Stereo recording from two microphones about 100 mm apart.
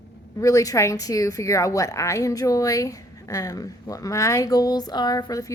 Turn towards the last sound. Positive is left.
turn(degrees=40)  # may be behind; listen again after turning